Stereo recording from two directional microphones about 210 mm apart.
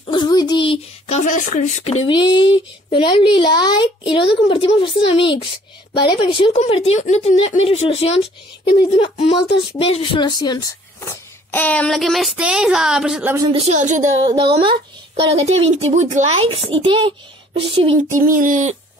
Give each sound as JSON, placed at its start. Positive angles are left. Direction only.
{"t": 0.0, "sound": "speech", "side_deg": 20}
{"t": 2.0, "sound": "a woman's voice", "side_deg": 20}
{"t": 13.5, "sound": "speech", "side_deg": -30}
{"t": 14.2, "sound": "a child's voice", "side_deg": -20}
{"t": 18.2, "sound": "speech", "side_deg": -40}